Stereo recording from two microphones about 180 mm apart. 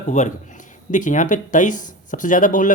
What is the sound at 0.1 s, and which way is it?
Speech, 45° left (ahead or behind).